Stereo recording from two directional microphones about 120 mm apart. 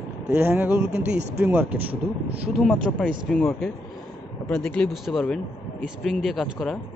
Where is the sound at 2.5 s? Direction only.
5° left (ahead or behind).